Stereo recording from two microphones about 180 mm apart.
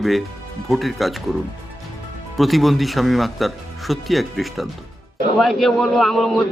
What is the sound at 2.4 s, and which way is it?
A man's voice, centre (ahead or behind).